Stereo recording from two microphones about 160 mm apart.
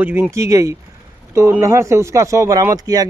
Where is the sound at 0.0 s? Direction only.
15° right (ahead or behind).